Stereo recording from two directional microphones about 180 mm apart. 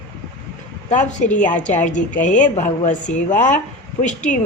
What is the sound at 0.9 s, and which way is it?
A woman's voice, 45° left (ahead or behind).